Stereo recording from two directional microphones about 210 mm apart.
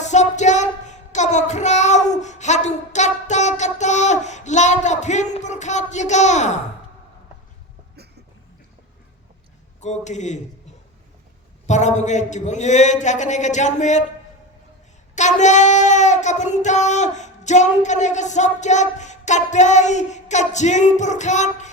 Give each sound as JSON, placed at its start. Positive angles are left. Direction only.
{"t": 0.0, "sound": "child singing", "side_deg": 35}
{"t": 9.8, "sound": "child singing", "side_deg": 35}
{"t": 11.6, "sound": "child singing", "side_deg": 35}
{"t": 15.1, "sound": "child singing", "side_deg": 35}